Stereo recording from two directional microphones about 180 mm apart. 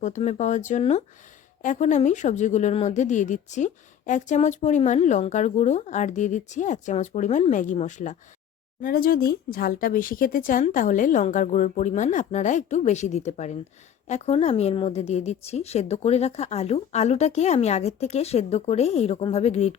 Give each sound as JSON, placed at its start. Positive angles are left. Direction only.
{"t": 0.0, "sound": "speech", "side_deg": 40}
{"t": 8.8, "sound": "speech", "side_deg": 55}